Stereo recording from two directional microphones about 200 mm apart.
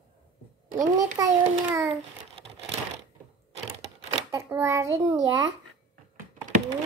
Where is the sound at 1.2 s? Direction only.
15° right (ahead or behind).